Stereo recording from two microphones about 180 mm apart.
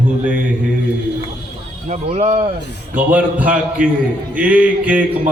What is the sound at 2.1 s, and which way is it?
Speech, 35° right (ahead or behind).